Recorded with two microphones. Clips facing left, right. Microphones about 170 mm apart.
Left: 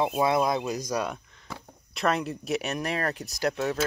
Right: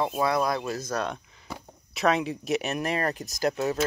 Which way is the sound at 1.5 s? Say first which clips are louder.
Right 2 dB; 5° right (ahead or behind).